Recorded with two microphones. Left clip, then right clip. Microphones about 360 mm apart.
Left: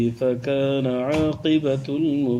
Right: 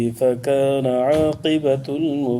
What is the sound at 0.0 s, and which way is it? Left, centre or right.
Mantra, right.